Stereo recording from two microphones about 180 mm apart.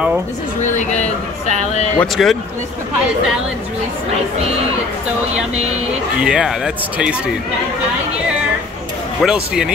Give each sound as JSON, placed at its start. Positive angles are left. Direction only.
{"t": 0.6, "sound": "a woman's voice", "side_deg": 40}
{"t": 2.0, "sound": "speech", "side_deg": 0}
{"t": 6.2, "sound": "speech", "side_deg": -5}
{"t": 9.2, "sound": "speech", "side_deg": -5}